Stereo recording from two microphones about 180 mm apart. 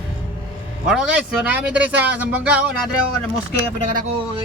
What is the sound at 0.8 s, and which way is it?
A man's voice, 5° right (ahead or behind).